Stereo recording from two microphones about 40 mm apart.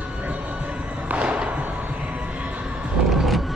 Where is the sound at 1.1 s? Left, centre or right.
Right.